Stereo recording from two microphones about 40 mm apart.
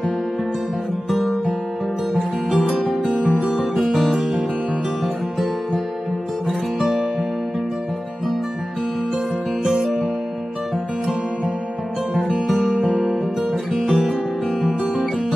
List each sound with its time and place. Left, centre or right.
1.1 s music: centre
3.3 s music: right
3.5 s music: centre
9.7 s music: centre
12.4 s music: centre
13.7 s music: centre